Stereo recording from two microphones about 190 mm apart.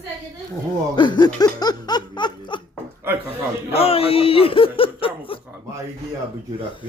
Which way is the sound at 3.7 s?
30° left (ahead or behind).